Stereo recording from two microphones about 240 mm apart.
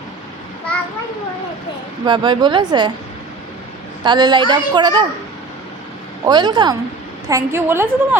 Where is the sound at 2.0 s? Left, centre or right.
Centre.